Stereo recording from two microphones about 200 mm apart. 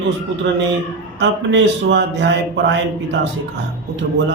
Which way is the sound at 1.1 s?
65° right (ahead or behind).